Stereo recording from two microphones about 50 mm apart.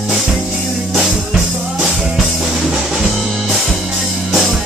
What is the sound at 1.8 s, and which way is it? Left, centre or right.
Music, centre.